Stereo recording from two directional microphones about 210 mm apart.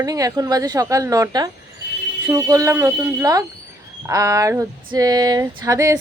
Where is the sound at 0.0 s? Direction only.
15° right (ahead or behind).